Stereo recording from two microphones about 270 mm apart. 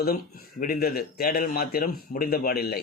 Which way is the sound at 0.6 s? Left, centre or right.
Left.